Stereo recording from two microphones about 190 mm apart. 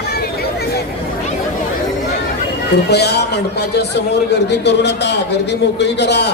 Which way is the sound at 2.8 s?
60° left (ahead or behind).